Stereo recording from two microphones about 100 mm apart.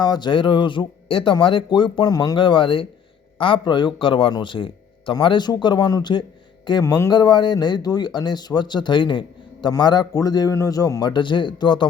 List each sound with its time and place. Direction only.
0.0 s a man's voice: 45° left (ahead or behind)
6.8 s speech: 30° left (ahead or behind)
7.1 s speech: 45° left (ahead or behind)